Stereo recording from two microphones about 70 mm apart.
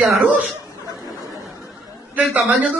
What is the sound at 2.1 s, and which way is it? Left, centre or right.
Speech, right.